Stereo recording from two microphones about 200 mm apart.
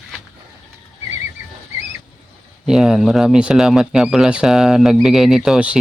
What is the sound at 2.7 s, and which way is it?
Speech, 5° right (ahead or behind).